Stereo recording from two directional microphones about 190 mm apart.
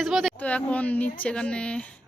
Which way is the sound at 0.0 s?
Centre (ahead or behind).